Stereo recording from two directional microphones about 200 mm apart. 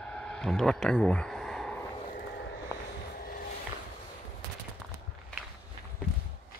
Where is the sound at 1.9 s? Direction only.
35° left (ahead or behind).